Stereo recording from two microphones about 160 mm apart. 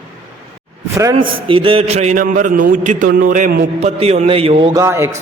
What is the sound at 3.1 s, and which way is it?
A man's voice, 65° right (ahead or behind).